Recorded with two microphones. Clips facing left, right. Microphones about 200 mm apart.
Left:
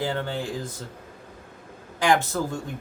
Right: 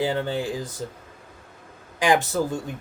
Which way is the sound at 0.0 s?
15° right (ahead or behind).